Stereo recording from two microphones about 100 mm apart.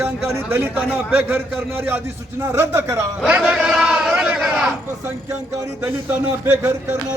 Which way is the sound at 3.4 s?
5° right (ahead or behind).